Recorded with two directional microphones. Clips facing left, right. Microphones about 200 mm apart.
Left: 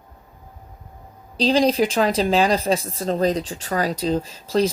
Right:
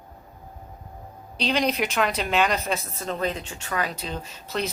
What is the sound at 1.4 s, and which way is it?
Speech, 30° left (ahead or behind).